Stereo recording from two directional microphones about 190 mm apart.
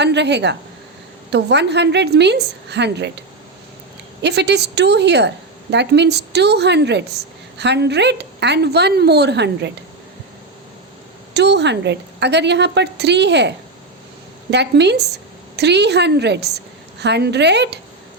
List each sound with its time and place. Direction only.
0.0 s a woman's voice: 65° right (ahead or behind)
11.3 s a woman's voice: 65° right (ahead or behind)
14.5 s a woman's voice: 65° right (ahead or behind)